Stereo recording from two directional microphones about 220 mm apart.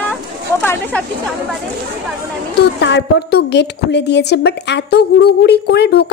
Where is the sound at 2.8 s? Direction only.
50° left (ahead or behind).